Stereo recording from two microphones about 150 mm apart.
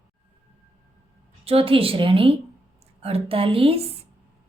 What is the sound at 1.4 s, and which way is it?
A woman's voice, 40° right (ahead or behind).